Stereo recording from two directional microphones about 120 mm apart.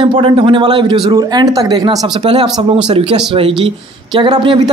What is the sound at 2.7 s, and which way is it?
Speech, 55° right (ahead or behind).